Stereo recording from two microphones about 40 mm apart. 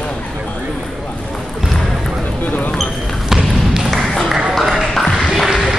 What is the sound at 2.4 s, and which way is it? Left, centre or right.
Basketball bounce, left.